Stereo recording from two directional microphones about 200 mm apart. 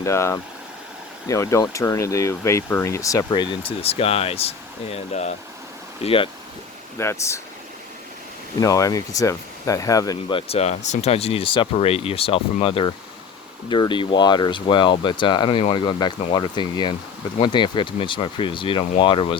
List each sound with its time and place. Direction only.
0.0 s speech: 15° left (ahead or behind)
7.0 s speech: 15° left (ahead or behind)
8.6 s speech: 15° left (ahead or behind)